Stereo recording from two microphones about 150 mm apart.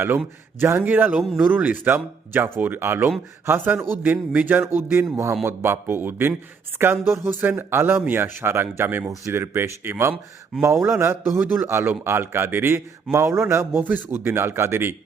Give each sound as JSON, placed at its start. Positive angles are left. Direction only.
{"t": 0.6, "sound": "a man's voice", "side_deg": -15}